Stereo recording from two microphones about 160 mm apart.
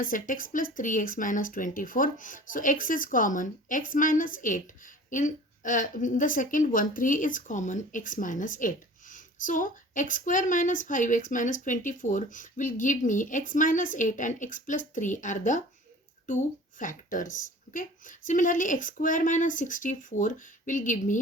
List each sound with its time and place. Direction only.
0.0 s speech: 60° left (ahead or behind)